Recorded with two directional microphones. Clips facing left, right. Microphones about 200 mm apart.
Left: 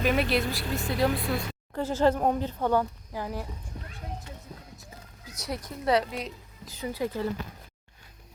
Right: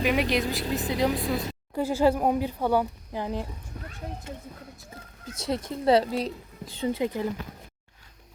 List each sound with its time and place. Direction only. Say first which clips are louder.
0.0 s speech: right 1 dB; 15° right (ahead or behind)
1.2 s speech: right 2 dB; centre (ahead or behind)
1.7 s speech: right 2 dB; 10° right (ahead or behind)
3.1 s a woman's voice: right 3 dB; 20° right (ahead or behind)
5.4 s a woman's voice: right 6 dB; 25° right (ahead or behind)